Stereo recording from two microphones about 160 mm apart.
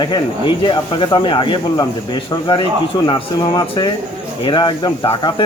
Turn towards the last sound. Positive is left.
turn(degrees=30)  # may be behind; listen again after turning